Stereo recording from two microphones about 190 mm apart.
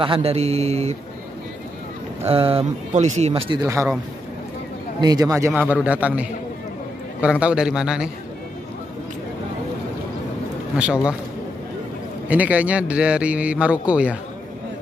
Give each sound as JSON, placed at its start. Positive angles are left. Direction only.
{"t": 0.0, "sound": "speech", "side_deg": -30}
{"t": 2.2, "sound": "speech", "side_deg": -30}
{"t": 5.0, "sound": "a man's voice", "side_deg": -20}
{"t": 10.8, "sound": "a man's voice", "side_deg": -5}
{"t": 12.3, "sound": "a man's voice", "side_deg": -5}